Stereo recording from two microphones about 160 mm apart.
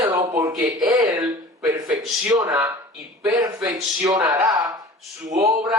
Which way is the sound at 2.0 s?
Centre (ahead or behind).